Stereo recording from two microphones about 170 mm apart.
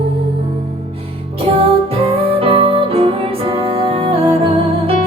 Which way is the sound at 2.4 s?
30° right (ahead or behind).